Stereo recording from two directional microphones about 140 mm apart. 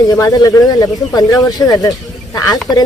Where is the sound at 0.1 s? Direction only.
25° left (ahead or behind).